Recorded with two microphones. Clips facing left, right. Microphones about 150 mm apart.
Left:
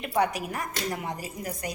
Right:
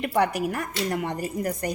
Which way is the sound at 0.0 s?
70° right (ahead or behind).